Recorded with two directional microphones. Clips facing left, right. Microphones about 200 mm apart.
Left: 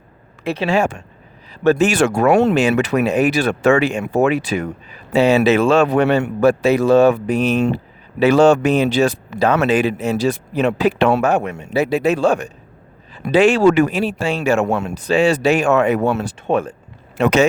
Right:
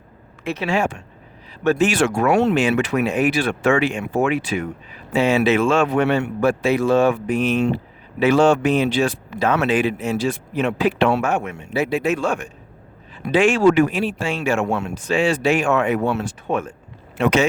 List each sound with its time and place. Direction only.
0.4 s speech: 35° left (ahead or behind)